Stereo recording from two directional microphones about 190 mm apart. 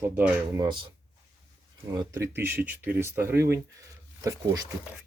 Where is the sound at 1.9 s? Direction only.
15° right (ahead or behind).